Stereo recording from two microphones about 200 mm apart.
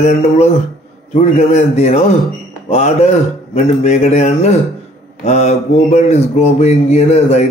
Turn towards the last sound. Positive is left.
turn(degrees=35)  # may be behind; listen again after turning